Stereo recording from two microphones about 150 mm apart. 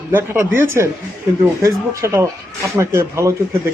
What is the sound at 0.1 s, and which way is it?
Speech, 15° right (ahead or behind).